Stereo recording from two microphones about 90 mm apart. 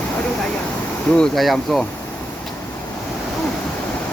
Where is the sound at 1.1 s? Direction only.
5° left (ahead or behind).